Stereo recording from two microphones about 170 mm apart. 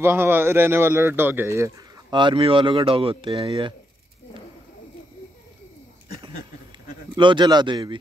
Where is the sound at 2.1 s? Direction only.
30° right (ahead or behind).